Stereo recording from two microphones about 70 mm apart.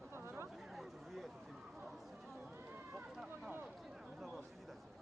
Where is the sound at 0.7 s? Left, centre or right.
Centre.